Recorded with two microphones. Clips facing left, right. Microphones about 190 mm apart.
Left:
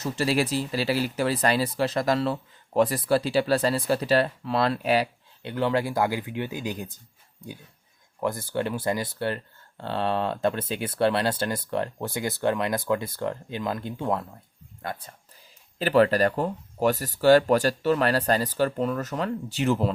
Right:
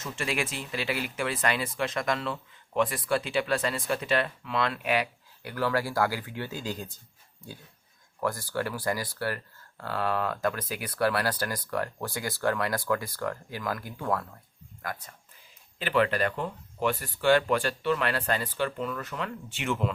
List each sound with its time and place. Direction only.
0.0 s speech: 35° left (ahead or behind); by 6.9 s 15° left (ahead or behind)
8.2 s speech: 20° left (ahead or behind)